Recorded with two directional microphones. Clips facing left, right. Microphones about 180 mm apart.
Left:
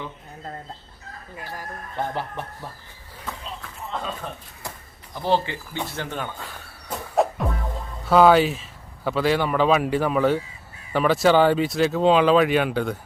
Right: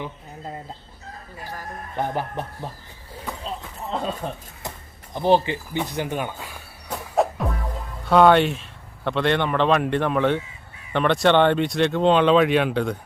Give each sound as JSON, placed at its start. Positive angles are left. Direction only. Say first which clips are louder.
{"t": 0.0, "sound": "music", "louder": "right 2 dB", "side_deg": -15}
{"t": 2.0, "sound": "music", "louder": "right 2 dB", "side_deg": -15}
{"t": 4.2, "sound": "speech", "louder": "right 4 dB", "side_deg": -35}
{"t": 4.6, "sound": "a sound", "louder": "right 2 dB", "side_deg": -20}
{"t": 5.1, "sound": "speech", "louder": "right 4 dB", "side_deg": -20}
{"t": 7.2, "sound": "speech", "louder": "even", "side_deg": 0}